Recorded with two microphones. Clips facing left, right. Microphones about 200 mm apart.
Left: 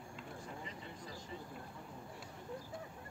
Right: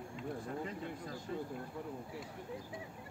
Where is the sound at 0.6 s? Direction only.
55° right (ahead or behind).